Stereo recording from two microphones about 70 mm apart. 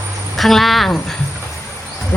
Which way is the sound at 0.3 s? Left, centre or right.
Centre.